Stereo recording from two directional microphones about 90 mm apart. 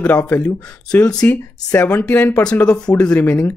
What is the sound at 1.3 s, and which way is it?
Speech, 25° left (ahead or behind).